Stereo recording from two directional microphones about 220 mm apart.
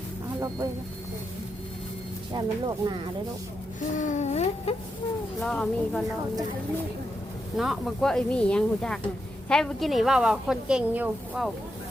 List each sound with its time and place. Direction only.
0.3 s vehicle: 15° right (ahead or behind)
2.3 s speech: 20° right (ahead or behind)
3.8 s baby cry: 35° left (ahead or behind)
5.4 s a woman's voice: centre (ahead or behind)
7.5 s a woman's voice: centre (ahead or behind)